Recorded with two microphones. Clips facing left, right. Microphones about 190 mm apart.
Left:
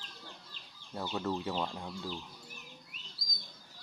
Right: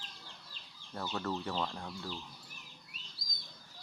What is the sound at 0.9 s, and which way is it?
Speech, 15° left (ahead or behind).